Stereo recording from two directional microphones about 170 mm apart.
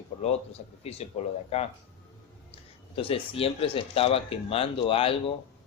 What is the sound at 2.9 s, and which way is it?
A man's voice, 35° left (ahead or behind).